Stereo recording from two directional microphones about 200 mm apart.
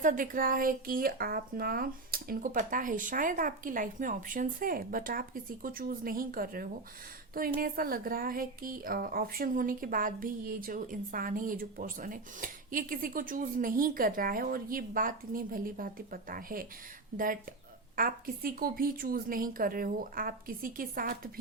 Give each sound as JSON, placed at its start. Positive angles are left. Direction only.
{"t": 0.0, "sound": "a woman's voice", "side_deg": -40}
{"t": 17.9, "sound": "a woman's voice", "side_deg": -45}